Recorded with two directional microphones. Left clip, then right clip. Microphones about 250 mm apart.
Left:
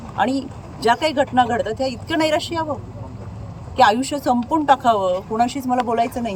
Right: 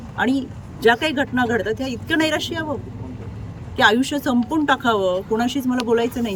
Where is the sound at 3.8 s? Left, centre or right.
Right.